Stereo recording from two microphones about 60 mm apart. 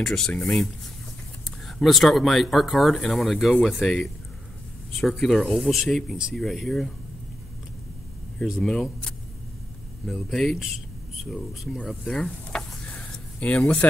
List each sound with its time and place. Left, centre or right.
0.0 s speech: centre
1.7 s speech: centre
8.5 s speech: centre
10.0 s speech: centre
12.0 s speech: centre